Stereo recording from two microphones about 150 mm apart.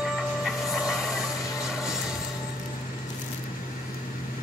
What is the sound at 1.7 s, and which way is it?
Music, 5° right (ahead or behind).